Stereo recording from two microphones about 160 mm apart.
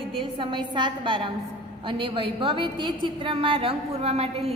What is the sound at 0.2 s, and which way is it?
A woman's voice, 30° right (ahead or behind).